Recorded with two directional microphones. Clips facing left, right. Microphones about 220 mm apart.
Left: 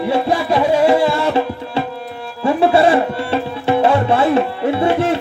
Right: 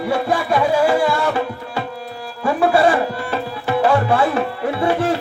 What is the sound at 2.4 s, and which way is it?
Tabla, 25° left (ahead or behind).